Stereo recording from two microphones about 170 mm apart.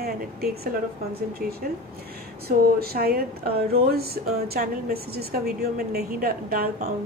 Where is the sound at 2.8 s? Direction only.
65° right (ahead or behind).